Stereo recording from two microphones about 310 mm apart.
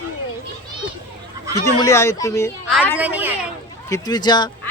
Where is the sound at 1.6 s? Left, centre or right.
Centre.